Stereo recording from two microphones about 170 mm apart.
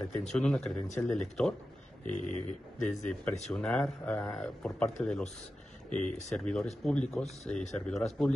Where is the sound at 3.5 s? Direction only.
5° left (ahead or behind).